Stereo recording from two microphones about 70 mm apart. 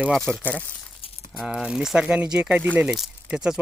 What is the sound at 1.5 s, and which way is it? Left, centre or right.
Speech, centre.